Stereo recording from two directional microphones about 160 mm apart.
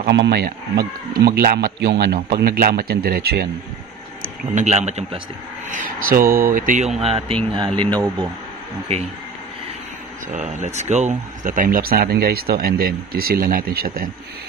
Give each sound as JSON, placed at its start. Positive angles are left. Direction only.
{"t": 0.0, "sound": "speech", "side_deg": -90}
{"t": 1.2, "sound": "a man's voice", "side_deg": -70}
{"t": 4.6, "sound": "a man's voice", "side_deg": -45}
{"t": 5.7, "sound": "speech", "side_deg": -60}
{"t": 10.2, "sound": "speech", "side_deg": -45}